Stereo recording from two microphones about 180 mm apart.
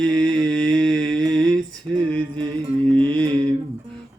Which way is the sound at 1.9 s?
30° right (ahead or behind).